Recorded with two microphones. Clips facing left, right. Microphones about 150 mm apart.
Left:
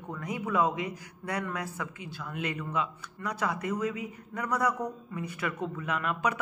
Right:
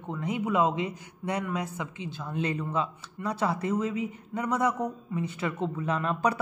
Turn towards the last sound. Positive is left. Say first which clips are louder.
# right 3 dB
turn(degrees=-35)  # may be behind; listen again after turning